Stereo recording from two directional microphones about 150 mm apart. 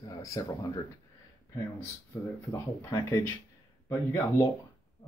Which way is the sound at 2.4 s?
20° left (ahead or behind).